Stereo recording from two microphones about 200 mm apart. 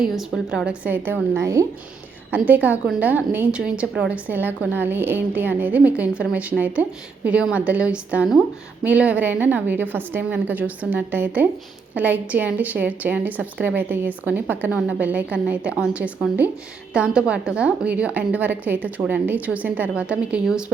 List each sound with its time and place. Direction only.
0.0 s a woman's voice: centre (ahead or behind)